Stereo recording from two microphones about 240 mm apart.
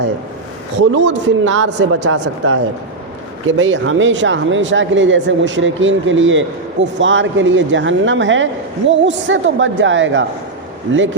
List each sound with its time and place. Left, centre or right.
0.8 s speech: right